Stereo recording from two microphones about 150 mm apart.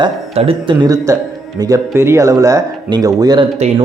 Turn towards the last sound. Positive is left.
turn(degrees=-25)  # may be behind; listen again after turning